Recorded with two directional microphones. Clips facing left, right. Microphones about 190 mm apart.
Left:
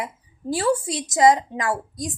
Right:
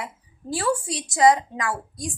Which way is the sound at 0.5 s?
25° left (ahead or behind).